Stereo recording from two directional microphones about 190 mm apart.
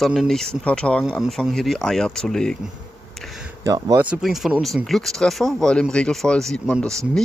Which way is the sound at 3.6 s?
15° right (ahead or behind).